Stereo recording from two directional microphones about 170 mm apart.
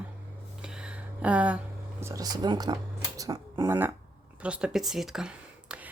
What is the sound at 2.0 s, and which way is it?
Speech, 20° right (ahead or behind).